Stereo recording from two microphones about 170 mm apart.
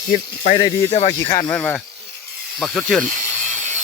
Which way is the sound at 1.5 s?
10° left (ahead or behind).